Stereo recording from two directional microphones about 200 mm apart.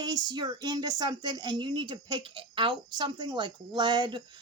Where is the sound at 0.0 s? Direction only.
20° right (ahead or behind).